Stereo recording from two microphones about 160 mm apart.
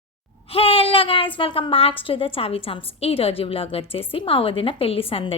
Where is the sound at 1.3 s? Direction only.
35° left (ahead or behind).